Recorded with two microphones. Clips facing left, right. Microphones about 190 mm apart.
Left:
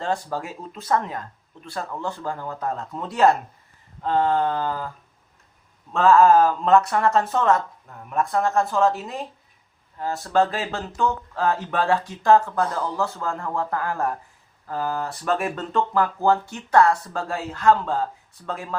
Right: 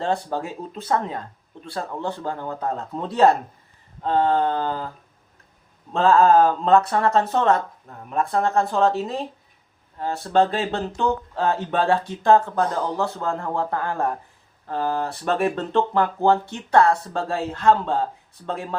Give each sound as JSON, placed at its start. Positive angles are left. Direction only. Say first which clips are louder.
{"t": 0.3, "sound": "speech", "louder": "right 2 dB", "side_deg": -25}
{"t": 5.9, "sound": "speech", "louder": "left 1 dB", "side_deg": -30}